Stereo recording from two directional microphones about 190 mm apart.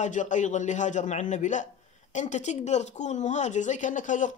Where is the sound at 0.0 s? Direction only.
40° left (ahead or behind).